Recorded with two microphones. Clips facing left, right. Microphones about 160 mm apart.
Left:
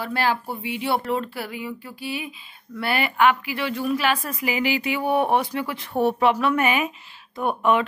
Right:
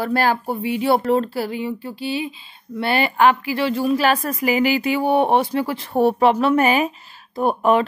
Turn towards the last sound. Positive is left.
turn(degrees=-40)  # may be behind; listen again after turning